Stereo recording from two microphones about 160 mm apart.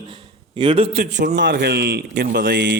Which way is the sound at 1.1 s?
90° right.